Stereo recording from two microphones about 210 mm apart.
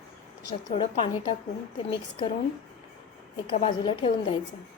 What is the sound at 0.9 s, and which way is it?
Speech, 25° left (ahead or behind).